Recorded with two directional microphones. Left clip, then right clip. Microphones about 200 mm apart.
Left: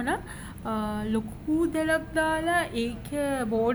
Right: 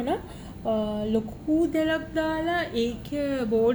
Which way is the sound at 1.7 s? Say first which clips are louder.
Even; 15° left (ahead or behind).